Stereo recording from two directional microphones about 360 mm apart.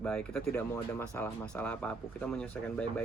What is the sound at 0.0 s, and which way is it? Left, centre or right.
Speech, centre.